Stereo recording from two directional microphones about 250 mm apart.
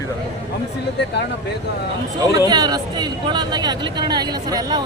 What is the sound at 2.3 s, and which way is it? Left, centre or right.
Speech, centre.